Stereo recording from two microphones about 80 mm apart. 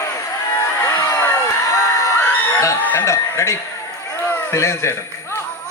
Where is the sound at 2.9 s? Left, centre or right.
Left.